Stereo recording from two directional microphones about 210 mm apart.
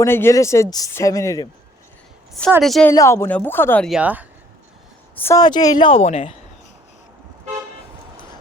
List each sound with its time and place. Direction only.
0.0 s speech: 10° left (ahead or behind)
2.6 s speech: centre (ahead or behind)
2.9 s speech: 15° left (ahead or behind); by 4.3 s 5° right (ahead or behind)
5.2 s a woman's voice: 15° left (ahead or behind)